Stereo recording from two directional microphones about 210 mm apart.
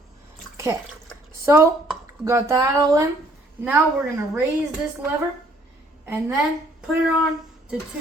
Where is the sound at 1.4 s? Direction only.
15° right (ahead or behind).